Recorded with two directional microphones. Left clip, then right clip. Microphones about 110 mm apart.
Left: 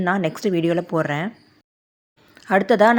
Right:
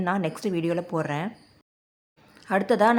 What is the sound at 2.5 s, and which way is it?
Speech, 30° left (ahead or behind).